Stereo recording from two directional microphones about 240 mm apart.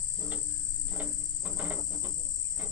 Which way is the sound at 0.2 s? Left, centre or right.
Centre.